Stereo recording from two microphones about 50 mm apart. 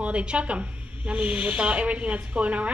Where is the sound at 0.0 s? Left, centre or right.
Right.